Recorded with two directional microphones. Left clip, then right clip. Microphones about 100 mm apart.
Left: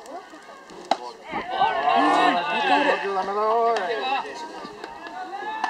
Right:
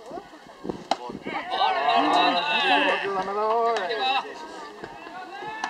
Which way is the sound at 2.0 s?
30° left (ahead or behind).